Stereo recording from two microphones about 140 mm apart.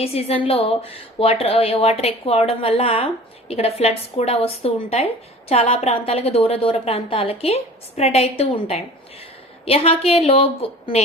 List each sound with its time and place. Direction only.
0.0 s a woman's voice: 45° left (ahead or behind)